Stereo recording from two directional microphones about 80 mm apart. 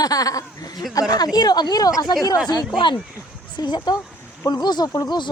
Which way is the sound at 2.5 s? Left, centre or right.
Left.